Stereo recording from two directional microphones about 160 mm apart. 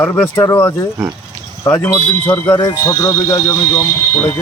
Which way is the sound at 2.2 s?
15° left (ahead or behind).